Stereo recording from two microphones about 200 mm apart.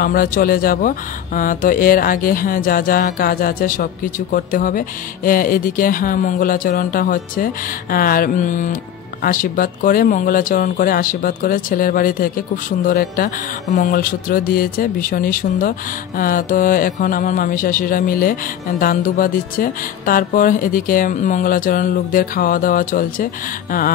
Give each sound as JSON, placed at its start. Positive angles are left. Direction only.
{"t": 0.0, "sound": "speech", "side_deg": 45}